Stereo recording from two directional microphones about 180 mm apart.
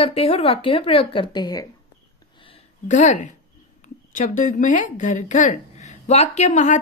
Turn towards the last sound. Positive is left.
turn(degrees=40)  # may be behind; listen again after turning